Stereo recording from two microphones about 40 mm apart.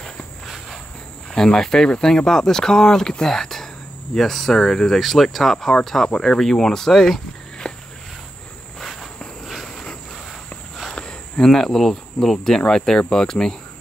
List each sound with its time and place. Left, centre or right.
1.3 s speech: centre
7.7 s a sound: centre
8.7 s insect: centre
9.5 s cricket: centre
11.0 s speech: left